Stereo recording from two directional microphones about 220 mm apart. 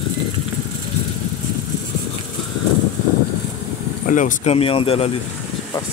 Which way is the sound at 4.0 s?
35° left (ahead or behind).